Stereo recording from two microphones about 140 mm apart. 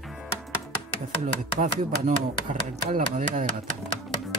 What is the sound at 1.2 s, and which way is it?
Chopping, 65° right (ahead or behind).